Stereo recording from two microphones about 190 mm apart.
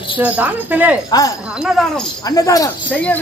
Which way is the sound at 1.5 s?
Centre (ahead or behind).